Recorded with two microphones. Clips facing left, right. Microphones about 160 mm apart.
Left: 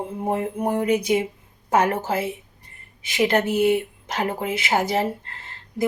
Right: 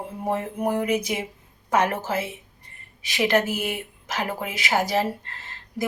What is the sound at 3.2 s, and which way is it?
Speech, 30° left (ahead or behind).